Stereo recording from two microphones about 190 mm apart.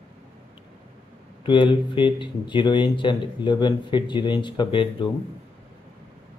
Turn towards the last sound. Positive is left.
turn(degrees=25)  # may be behind; listen again after turning